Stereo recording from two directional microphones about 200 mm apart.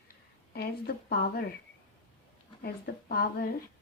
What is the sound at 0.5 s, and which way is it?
Speech, 50° left (ahead or behind).